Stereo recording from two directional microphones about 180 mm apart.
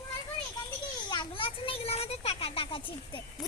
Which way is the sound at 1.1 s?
25° left (ahead or behind).